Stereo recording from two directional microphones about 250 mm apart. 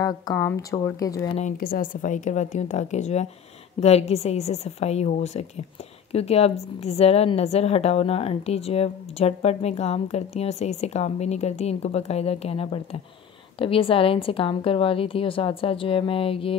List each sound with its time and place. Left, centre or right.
0.0 s speech: centre
1.3 s a woman's voice: left